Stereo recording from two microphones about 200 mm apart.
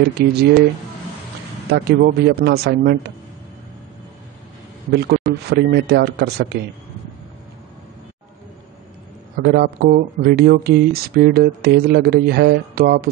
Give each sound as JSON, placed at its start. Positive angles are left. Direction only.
{"t": 1.7, "sound": "speech", "side_deg": -55}
{"t": 4.9, "sound": "speech", "side_deg": -50}
{"t": 9.4, "sound": "speech", "side_deg": -50}